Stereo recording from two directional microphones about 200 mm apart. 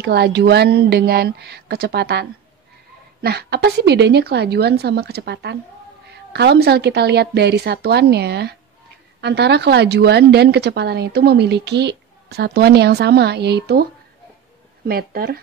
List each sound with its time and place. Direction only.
0.0 s speech: 55° right (ahead or behind)
14.9 s speech: 50° right (ahead or behind)